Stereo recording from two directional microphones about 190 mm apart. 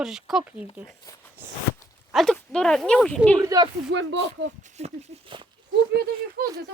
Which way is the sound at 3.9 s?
70° right (ahead or behind).